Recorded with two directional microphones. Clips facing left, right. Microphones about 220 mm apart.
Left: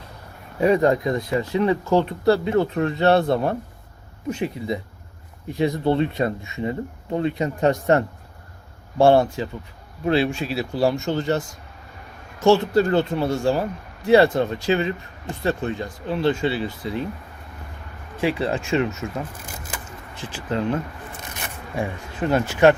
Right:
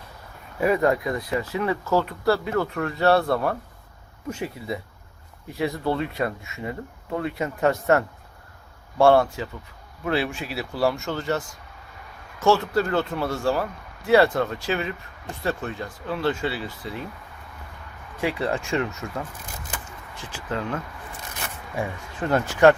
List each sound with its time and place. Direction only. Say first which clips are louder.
0.6 s speech: left 3 dB; 25° left (ahead or behind)
9.0 s speech: left 2 dB; 20° left (ahead or behind)
12.5 s speech: left 4 dB; 25° left (ahead or behind)
18.2 s speech: left 3 dB; 25° left (ahead or behind)
20.3 s speech: left 5 dB; 25° left (ahead or behind)